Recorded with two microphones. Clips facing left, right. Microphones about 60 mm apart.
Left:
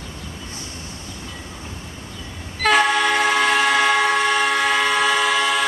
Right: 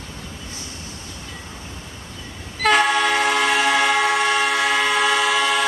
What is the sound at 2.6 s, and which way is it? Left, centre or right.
Train, centre.